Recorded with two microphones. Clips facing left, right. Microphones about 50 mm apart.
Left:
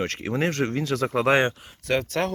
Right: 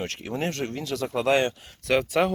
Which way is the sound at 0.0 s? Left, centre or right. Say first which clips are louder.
Left 4 dB; left.